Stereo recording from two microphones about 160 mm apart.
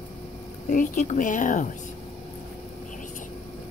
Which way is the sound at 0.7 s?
50° left (ahead or behind).